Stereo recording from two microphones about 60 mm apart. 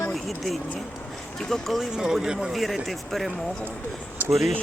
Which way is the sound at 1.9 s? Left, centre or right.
Centre.